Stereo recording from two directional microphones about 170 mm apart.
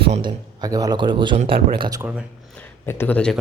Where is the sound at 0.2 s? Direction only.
20° right (ahead or behind).